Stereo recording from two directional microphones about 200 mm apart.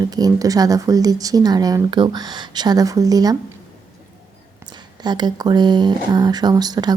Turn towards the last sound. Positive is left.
turn(degrees=-20)  # may be behind; listen again after turning